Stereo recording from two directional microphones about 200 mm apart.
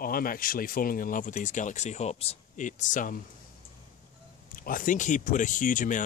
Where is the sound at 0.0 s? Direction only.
45° left (ahead or behind).